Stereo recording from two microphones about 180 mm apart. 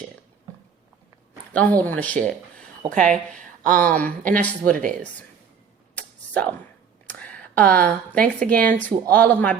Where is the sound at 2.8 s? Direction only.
25° right (ahead or behind).